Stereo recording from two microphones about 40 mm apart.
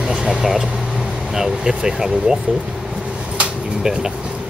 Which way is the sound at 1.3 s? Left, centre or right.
Centre.